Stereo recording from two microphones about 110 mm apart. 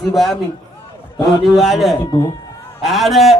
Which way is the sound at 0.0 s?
Centre (ahead or behind).